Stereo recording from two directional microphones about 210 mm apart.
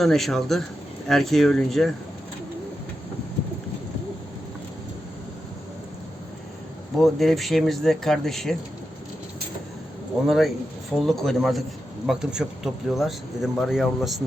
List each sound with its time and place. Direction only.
0.0 s a man's voice: centre (ahead or behind)
6.9 s a man's voice: centre (ahead or behind)
10.2 s a man's voice: centre (ahead or behind)